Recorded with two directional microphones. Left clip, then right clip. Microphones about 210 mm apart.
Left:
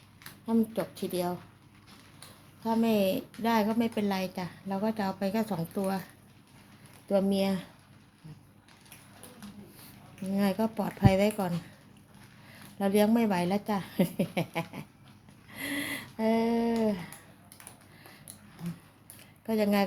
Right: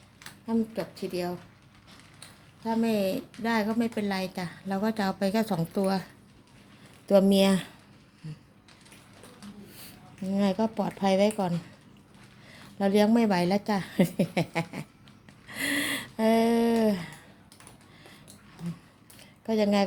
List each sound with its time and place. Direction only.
0.4 s a woman's voice: 10° left (ahead or behind)
2.6 s a woman's voice: centre (ahead or behind); by 6.0 s 20° right (ahead or behind)
7.1 s speech: 30° right (ahead or behind)
10.2 s speech: 15° right (ahead or behind)
12.8 s a woman's voice: 15° right (ahead or behind)
15.4 s a sound: 25° right (ahead or behind)
19.5 s speech: 15° right (ahead or behind)